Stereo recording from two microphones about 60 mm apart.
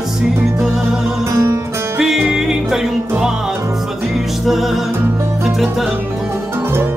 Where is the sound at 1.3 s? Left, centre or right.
Right.